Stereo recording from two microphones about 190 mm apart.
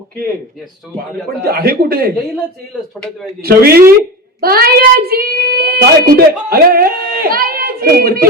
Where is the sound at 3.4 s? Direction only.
55° right (ahead or behind).